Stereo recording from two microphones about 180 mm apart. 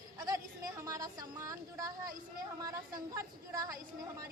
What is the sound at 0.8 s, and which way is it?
Speech, 20° right (ahead or behind).